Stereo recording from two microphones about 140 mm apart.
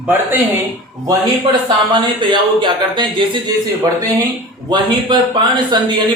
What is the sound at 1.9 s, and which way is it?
Speech, 35° right (ahead or behind).